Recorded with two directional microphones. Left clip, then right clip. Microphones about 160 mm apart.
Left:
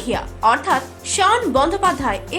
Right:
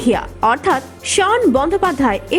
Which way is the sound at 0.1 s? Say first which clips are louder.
Right 1 dB; 45° right (ahead or behind).